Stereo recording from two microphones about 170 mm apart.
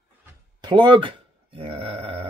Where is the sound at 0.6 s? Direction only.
25° right (ahead or behind).